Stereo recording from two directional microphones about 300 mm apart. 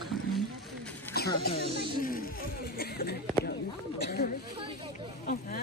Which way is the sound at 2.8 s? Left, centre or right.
Left.